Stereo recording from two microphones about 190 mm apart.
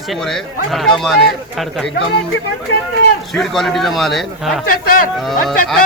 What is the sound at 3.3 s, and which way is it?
Speech, centre (ahead or behind).